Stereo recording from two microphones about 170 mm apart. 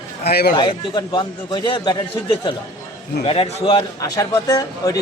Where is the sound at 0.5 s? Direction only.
25° left (ahead or behind).